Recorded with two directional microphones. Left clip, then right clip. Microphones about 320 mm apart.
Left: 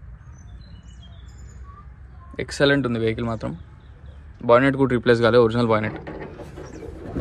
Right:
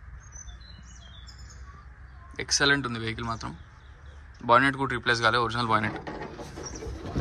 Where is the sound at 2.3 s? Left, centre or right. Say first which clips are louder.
Left 4 dB; centre.